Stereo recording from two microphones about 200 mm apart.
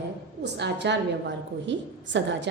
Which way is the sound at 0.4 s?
60° right (ahead or behind).